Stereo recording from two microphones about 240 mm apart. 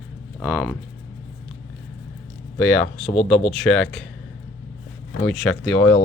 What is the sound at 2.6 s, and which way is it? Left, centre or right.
Speech, centre.